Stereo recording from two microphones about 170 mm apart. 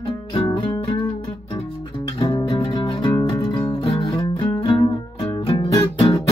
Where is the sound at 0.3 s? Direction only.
30° left (ahead or behind).